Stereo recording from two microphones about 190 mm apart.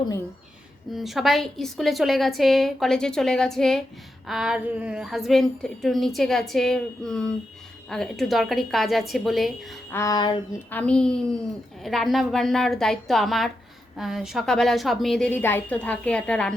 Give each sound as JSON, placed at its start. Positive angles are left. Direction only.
{"t": 0.9, "sound": "a woman's voice", "side_deg": 0}
{"t": 9.9, "sound": "a sound", "side_deg": 15}
{"t": 10.7, "sound": "a woman's voice", "side_deg": 5}